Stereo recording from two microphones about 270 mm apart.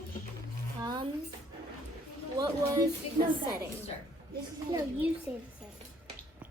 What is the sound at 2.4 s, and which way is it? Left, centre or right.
Speech, centre.